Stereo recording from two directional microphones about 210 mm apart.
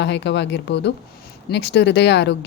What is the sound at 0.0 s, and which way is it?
Speech, 55° left (ahead or behind).